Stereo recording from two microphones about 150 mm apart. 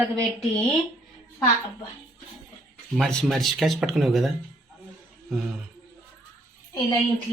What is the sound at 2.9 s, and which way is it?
Speech, centre (ahead or behind).